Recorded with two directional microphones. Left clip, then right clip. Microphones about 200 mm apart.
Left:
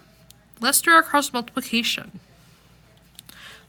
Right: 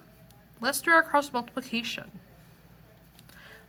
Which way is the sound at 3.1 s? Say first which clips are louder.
Left 8 dB; 55° left (ahead or behind).